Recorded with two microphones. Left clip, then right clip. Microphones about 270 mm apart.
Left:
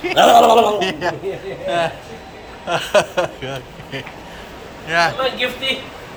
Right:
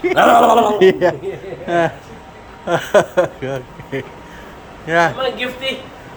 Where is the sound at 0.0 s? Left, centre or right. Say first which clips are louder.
Even; centre.